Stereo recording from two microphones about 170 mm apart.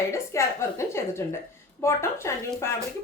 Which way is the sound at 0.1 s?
15° left (ahead or behind).